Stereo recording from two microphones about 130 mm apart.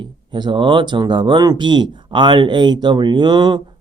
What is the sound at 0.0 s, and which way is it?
Speech, 35° right (ahead or behind).